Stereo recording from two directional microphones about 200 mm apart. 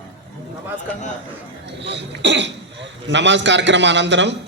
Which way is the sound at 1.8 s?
60° right (ahead or behind).